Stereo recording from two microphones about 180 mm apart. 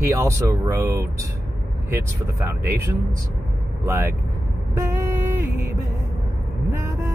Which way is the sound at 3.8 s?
15° right (ahead or behind).